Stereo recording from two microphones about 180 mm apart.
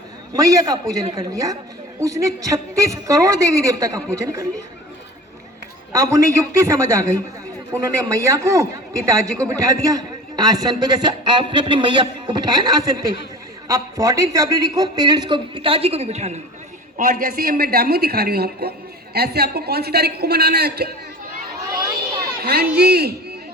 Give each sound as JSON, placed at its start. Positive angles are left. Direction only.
{"t": 0.3, "sound": "a man's voice", "side_deg": -20}
{"t": 5.9, "sound": "a man's voice", "side_deg": -15}
{"t": 17.0, "sound": "a man's voice", "side_deg": -45}
{"t": 22.4, "sound": "a man's voice", "side_deg": -60}